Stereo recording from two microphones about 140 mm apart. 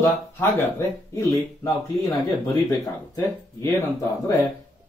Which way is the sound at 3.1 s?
15° left (ahead or behind).